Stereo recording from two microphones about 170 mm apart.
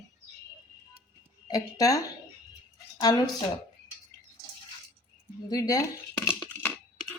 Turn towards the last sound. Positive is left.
turn(degrees=10)  # may be behind; listen again after turning